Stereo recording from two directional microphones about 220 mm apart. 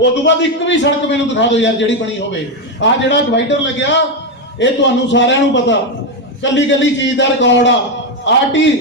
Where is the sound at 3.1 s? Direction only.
55° left (ahead or behind).